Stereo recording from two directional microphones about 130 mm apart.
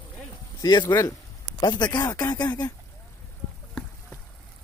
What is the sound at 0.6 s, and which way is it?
Speech, 30° left (ahead or behind).